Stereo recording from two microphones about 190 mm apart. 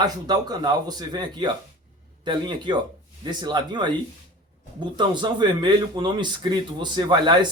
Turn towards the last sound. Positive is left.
turn(degrees=-25)  # may be behind; listen again after turning